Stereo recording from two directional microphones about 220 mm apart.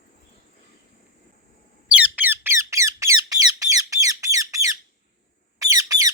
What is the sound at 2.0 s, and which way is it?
Squeak, 10° right (ahead or behind).